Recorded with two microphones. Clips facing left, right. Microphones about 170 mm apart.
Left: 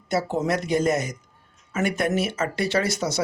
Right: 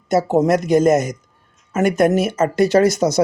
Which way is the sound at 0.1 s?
45° right (ahead or behind).